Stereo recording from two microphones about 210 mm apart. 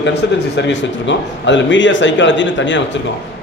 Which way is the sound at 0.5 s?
60° left (ahead or behind).